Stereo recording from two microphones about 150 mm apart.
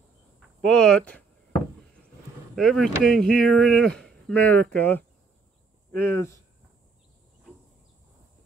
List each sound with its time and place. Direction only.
0.7 s speech: 5° left (ahead or behind)
2.5 s speech: centre (ahead or behind)